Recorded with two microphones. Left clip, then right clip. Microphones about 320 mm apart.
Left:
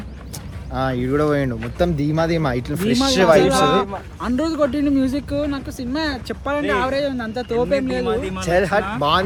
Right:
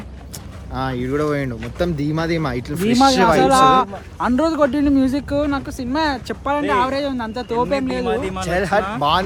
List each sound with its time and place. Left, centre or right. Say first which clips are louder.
0.7 s speech: left 2 dB; centre
3.8 s speech: right 3 dB; right
8.0 s speech: right 1 dB; right
8.4 s speech: left 1 dB; centre